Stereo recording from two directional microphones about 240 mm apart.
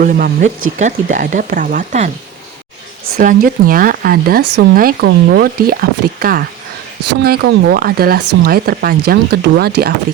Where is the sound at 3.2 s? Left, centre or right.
Right.